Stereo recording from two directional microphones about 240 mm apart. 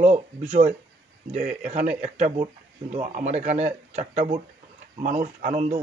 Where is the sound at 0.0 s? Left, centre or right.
Right.